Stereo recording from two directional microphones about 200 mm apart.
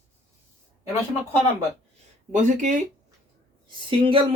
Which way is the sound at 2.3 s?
40° right (ahead or behind).